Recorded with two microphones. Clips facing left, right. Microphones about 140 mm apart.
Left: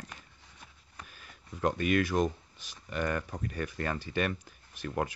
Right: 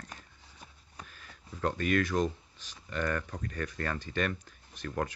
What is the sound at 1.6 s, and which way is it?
Speech, 15° left (ahead or behind).